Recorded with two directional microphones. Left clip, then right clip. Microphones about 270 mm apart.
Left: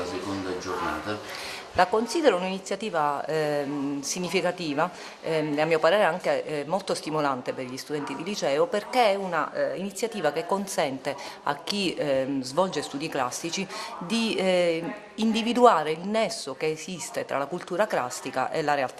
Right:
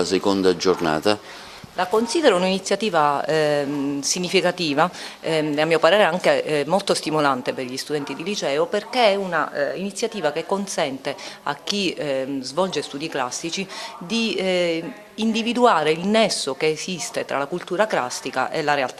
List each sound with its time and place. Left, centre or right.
1.7 s speech: right
2.0 s speech: right